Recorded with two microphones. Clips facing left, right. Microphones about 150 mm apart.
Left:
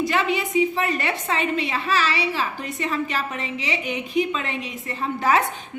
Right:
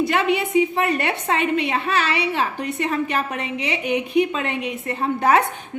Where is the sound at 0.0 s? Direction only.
60° right (ahead or behind).